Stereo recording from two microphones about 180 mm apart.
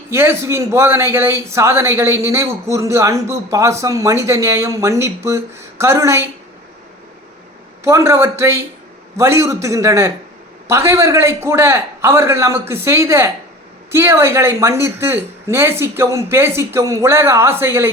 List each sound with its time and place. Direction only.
0.1 s speech: 15° right (ahead or behind)
7.9 s speech: 15° right (ahead or behind)